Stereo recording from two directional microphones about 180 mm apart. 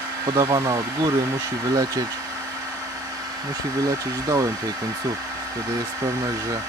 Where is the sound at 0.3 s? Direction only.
15° right (ahead or behind).